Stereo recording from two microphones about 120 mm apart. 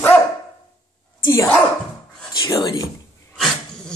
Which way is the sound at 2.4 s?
30° left (ahead or behind).